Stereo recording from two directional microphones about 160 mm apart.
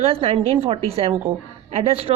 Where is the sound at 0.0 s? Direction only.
35° right (ahead or behind).